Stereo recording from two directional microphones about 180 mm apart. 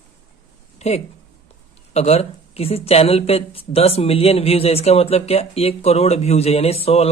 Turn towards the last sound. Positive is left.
turn(degrees=35)  # may be behind; listen again after turning